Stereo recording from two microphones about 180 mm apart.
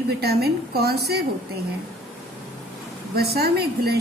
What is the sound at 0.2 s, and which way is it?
A woman's voice, 60° right (ahead or behind).